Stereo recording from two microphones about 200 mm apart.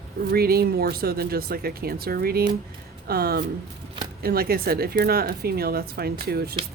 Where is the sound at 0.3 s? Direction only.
50° right (ahead or behind).